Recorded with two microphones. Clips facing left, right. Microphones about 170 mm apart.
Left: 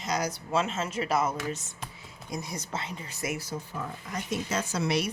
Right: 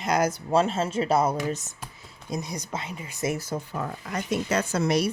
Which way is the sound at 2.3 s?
20° right (ahead or behind).